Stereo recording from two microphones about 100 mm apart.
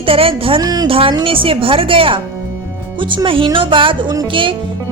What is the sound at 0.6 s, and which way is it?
Speech, 40° right (ahead or behind).